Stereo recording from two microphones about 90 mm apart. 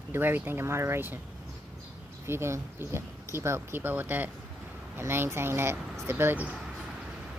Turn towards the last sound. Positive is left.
turn(degrees=-20)  # may be behind; listen again after turning